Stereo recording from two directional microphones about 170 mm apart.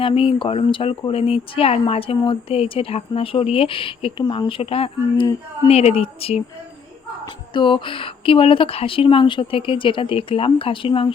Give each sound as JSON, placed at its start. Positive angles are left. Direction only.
{"t": 0.0, "sound": "speech", "side_deg": 30}